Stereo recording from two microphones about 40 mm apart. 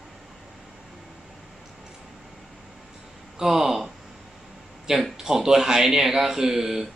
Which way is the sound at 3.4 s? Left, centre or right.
Centre.